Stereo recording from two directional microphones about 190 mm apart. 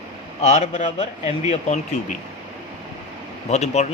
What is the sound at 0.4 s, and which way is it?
Speech, 35° left (ahead or behind).